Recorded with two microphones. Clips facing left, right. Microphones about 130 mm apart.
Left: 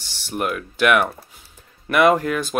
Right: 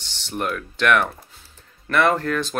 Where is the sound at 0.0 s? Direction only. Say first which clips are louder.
Left 2 dB; 10° left (ahead or behind).